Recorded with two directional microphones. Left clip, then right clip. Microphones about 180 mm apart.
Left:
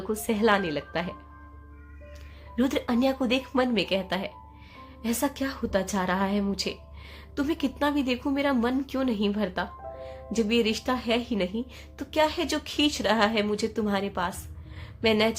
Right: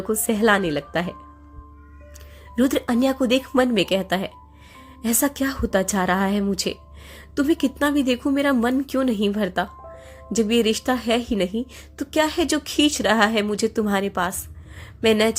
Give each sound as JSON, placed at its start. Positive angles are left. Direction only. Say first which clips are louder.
{"t": 0.1, "sound": "a woman's voice", "louder": "right 5 dB", "side_deg": -30}
{"t": 2.6, "sound": "a woman's voice", "louder": "right 5 dB", "side_deg": -35}
{"t": 14.8, "sound": "a sound", "louder": "right 5 dB", "side_deg": -35}